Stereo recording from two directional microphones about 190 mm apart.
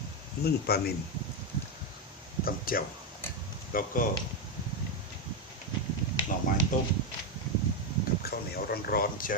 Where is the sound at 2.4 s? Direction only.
50° left (ahead or behind).